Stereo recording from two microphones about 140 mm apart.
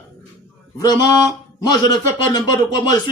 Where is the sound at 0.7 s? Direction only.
30° left (ahead or behind).